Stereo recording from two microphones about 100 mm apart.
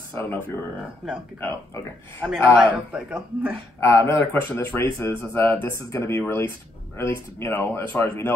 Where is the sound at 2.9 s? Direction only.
15° right (ahead or behind).